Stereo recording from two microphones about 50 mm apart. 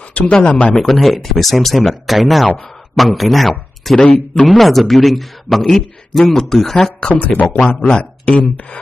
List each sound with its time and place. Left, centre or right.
0.1 s speech: centre
0.7 s speech: centre
3.9 s speech: centre
4.5 s speech: centre
7.2 s a man's voice: left
7.7 s speech: centre
8.0 s speech: left